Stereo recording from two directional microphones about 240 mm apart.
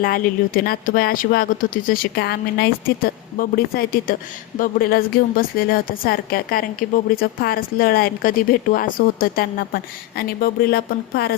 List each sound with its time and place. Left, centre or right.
0.0 s a woman's voice: left